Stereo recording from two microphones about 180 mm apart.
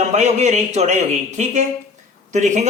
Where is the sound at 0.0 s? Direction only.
40° right (ahead or behind).